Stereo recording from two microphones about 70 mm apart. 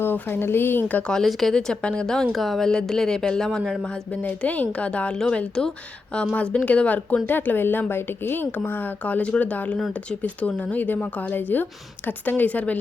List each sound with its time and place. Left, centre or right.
0.0 s a woman's voice: left
1.0 s a woman's voice: centre
2.3 s speech: centre
2.6 s a woman's voice: centre
4.2 s a woman's voice: left